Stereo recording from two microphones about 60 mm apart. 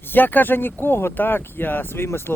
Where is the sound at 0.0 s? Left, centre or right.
Left.